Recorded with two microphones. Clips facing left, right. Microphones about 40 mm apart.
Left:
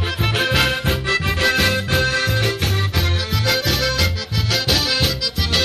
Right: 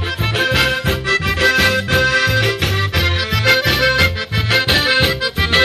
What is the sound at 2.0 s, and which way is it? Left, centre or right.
Music, right.